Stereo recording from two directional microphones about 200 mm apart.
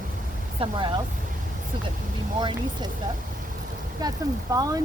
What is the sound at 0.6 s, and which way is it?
Speech, 25° right (ahead or behind).